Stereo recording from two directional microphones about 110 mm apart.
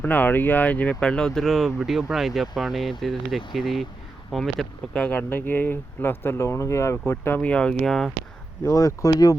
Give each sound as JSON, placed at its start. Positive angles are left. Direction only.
{"t": 0.0, "sound": "speech", "side_deg": 15}
{"t": 5.0, "sound": "speech", "side_deg": 15}
{"t": 8.6, "sound": "speech", "side_deg": 30}